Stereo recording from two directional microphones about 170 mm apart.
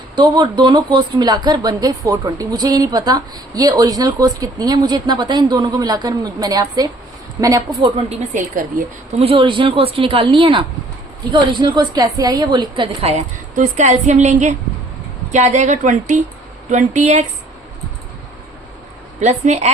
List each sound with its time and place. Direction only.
0.2 s speech: 25° right (ahead or behind)
8.3 s a woman's voice: 50° right (ahead or behind)
9.1 s a woman's voice: 35° right (ahead or behind)
19.2 s speech: 40° right (ahead or behind)